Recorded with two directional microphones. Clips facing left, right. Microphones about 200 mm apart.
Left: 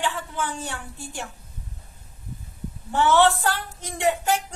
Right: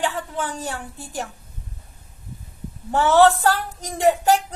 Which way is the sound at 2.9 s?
40° right (ahead or behind).